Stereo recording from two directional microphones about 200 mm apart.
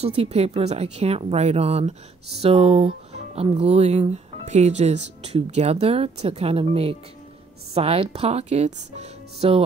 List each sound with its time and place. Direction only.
0.0 s speech: 30° right (ahead or behind)